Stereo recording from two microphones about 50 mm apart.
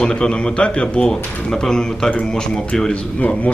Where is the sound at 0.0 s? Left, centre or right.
Centre.